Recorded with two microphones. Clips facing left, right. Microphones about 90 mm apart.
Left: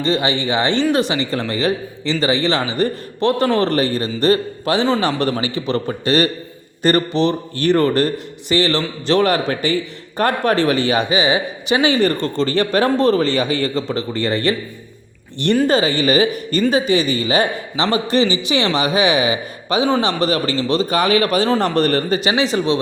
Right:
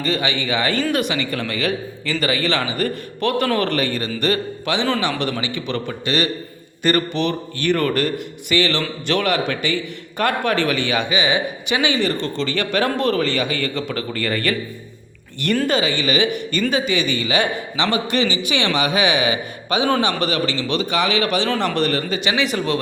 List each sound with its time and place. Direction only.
0.0 s a man's voice: 30° left (ahead or behind)
15.6 s a man's voice: 35° left (ahead or behind)